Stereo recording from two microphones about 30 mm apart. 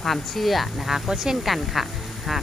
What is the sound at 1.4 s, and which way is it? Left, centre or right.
Speech, centre.